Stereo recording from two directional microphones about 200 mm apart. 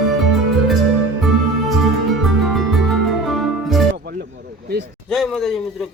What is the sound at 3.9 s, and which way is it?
Music, 55° right (ahead or behind).